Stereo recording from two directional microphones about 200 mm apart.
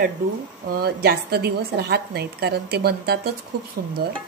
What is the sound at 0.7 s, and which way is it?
A woman's voice, 50° right (ahead or behind).